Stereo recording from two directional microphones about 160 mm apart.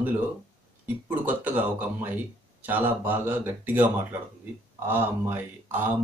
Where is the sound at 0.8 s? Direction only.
10° right (ahead or behind).